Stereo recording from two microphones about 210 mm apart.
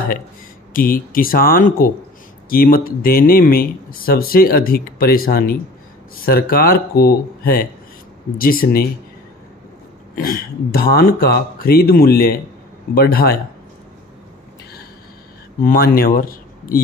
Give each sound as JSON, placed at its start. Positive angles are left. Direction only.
{"t": 0.7, "sound": "speech", "side_deg": 40}
{"t": 10.1, "sound": "speech", "side_deg": 45}
{"t": 15.6, "sound": "speech", "side_deg": 45}